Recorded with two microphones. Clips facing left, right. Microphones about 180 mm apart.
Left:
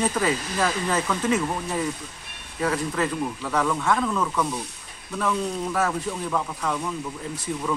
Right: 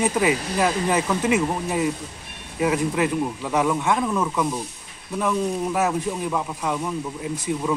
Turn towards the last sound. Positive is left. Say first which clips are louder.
# right 3 dB
turn(degrees=-10)  # may be behind; listen again after turning